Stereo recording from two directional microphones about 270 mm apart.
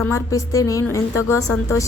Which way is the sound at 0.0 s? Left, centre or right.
Centre.